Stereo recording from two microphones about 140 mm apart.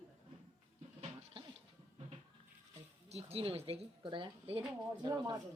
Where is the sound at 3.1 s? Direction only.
45° right (ahead or behind); by 5.3 s 30° right (ahead or behind).